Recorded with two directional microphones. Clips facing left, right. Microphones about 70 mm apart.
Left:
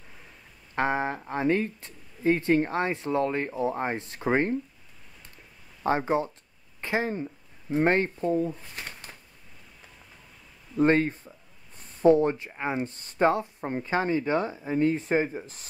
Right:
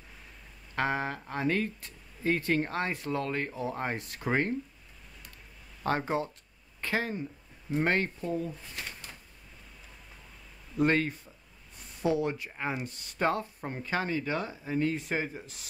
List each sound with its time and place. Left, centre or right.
0.7 s speech: left
5.8 s speech: centre; by 9.1 s left
10.8 s speech: left
12.4 s speech: centre
12.7 s speech: left